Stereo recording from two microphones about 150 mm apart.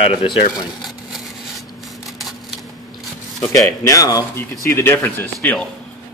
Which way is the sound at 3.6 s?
20° left (ahead or behind).